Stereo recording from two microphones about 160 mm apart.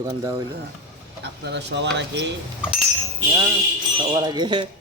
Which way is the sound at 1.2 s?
90° right.